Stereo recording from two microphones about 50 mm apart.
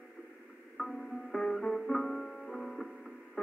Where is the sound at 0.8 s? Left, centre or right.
Centre.